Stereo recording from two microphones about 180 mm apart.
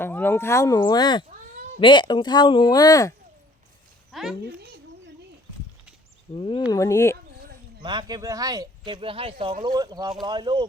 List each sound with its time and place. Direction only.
0.0 s speech: 10° left (ahead or behind)
4.1 s a child's voice: centre (ahead or behind)
4.4 s a child's voice: 65° right (ahead or behind)
6.3 s speech: 25° left (ahead or behind)
7.8 s speech: 25° right (ahead or behind)